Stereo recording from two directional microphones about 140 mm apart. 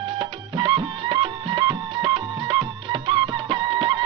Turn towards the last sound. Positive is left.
turn(degrees=-35)  # may be behind; listen again after turning